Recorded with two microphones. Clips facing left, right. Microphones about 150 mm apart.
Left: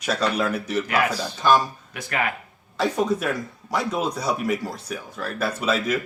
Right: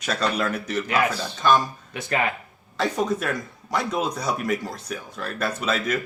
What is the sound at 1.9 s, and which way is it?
Speech, 25° right (ahead or behind).